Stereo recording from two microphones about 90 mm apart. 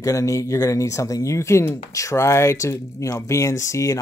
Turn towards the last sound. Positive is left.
turn(degrees=35)  # may be behind; listen again after turning